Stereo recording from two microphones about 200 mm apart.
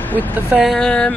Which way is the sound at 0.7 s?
5° left (ahead or behind).